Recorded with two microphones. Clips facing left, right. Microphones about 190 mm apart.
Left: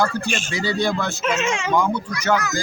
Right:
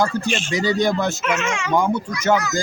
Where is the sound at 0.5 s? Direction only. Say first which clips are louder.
Right 3 dB; 15° right (ahead or behind).